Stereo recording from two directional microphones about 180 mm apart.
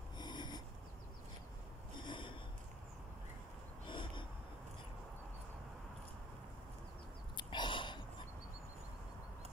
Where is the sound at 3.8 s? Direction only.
25° left (ahead or behind).